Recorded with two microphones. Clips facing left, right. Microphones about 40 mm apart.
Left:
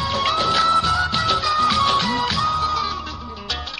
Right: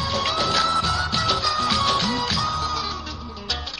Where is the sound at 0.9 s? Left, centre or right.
Centre.